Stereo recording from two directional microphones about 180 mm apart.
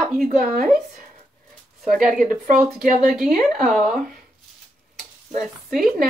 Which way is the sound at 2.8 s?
45° right (ahead or behind).